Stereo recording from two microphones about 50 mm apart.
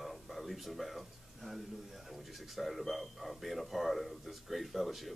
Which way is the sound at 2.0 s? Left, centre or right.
Centre.